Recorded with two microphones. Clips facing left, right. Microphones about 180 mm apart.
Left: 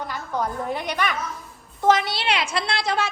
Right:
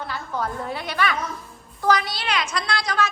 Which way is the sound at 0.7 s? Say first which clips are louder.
Even; 15° left (ahead or behind).